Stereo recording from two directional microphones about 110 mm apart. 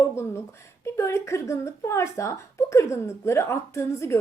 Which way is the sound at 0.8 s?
25° left (ahead or behind).